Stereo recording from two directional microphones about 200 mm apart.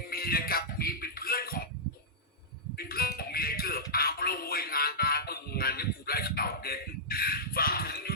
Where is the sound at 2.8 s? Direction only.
50° left (ahead or behind).